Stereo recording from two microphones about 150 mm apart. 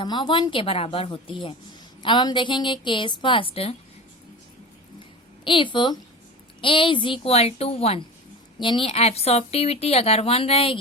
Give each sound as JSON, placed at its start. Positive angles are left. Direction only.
{"t": 0.0, "sound": "a woman's voice", "side_deg": 30}
{"t": 5.5, "sound": "a woman's voice", "side_deg": 35}